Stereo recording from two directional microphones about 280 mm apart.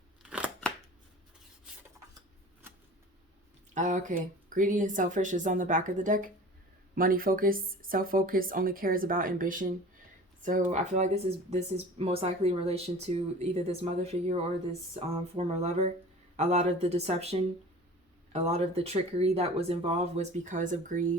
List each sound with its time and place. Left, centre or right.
0.2 s scissors: centre
3.8 s speech: right